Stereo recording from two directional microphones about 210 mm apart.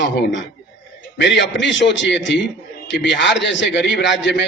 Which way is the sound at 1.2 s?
55° left (ahead or behind).